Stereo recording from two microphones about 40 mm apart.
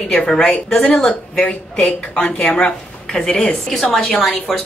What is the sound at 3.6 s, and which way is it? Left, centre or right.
A woman's voice, centre.